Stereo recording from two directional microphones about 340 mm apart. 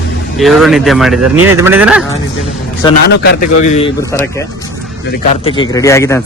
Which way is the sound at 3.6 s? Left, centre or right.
Centre.